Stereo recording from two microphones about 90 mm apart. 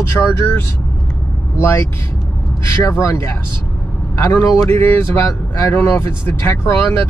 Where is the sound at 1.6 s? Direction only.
30° left (ahead or behind).